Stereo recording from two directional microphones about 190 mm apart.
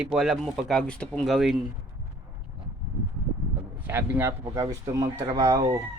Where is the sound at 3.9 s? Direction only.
10° right (ahead or behind).